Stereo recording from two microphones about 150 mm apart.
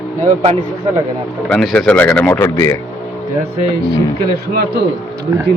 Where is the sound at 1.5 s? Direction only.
5° left (ahead or behind).